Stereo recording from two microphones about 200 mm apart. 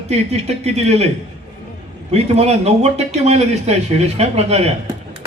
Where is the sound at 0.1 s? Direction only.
35° right (ahead or behind).